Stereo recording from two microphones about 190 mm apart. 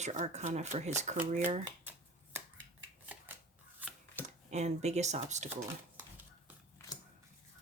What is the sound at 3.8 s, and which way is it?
Chopping, 10° right (ahead or behind).